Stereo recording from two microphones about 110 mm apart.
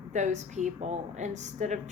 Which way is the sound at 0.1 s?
90° right.